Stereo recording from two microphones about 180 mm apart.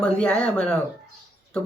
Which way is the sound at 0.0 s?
5° left (ahead or behind).